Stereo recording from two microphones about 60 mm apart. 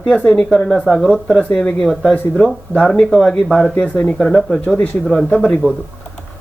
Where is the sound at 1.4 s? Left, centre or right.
Left.